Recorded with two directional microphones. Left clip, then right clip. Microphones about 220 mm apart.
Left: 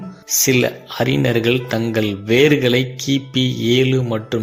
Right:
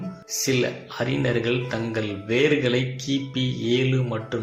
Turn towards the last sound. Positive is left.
turn(degrees=40)  # may be behind; listen again after turning